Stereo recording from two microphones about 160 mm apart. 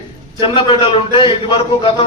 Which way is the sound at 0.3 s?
30° left (ahead or behind).